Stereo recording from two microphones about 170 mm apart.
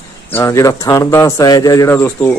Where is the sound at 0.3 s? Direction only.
20° left (ahead or behind).